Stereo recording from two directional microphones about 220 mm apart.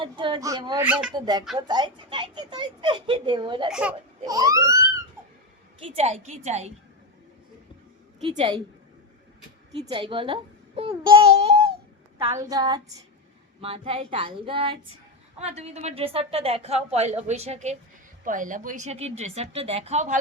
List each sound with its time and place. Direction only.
0.0 s a woman's voice: 20° right (ahead or behind)
3.7 s a child's voice: 5° right (ahead or behind)
4.3 s speech: 15° right (ahead or behind)
5.8 s a woman's voice: 25° right (ahead or behind)
8.2 s a woman's voice: 20° right (ahead or behind)
9.7 s a woman's voice: 25° right (ahead or behind)
12.3 s a woman's voice: 15° right (ahead or behind); by 20.1 s 30° right (ahead or behind)